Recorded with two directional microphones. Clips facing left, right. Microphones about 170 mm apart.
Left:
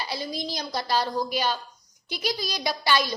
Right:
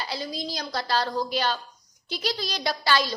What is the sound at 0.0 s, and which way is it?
A woman's voice, 15° left (ahead or behind).